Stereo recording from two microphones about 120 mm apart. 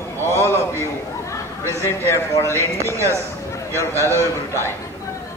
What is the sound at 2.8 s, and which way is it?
Speech, 25° right (ahead or behind).